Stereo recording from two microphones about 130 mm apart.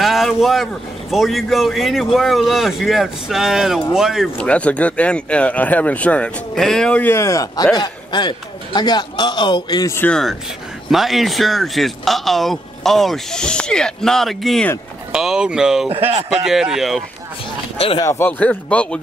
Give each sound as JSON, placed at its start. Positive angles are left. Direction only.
{"t": 0.0, "sound": "vehicle", "side_deg": 0}
{"t": 1.1, "sound": "speech", "side_deg": 0}
{"t": 4.4, "sound": "a man's voice", "side_deg": 10}
{"t": 9.9, "sound": "speech", "side_deg": 10}
{"t": 10.9, "sound": "speech", "side_deg": 0}
{"t": 16.1, "sound": "speech", "side_deg": -55}
{"t": 16.4, "sound": "speech", "side_deg": -5}
{"t": 17.7, "sound": "speech", "side_deg": 45}
{"t": 18.0, "sound": "speech", "side_deg": 15}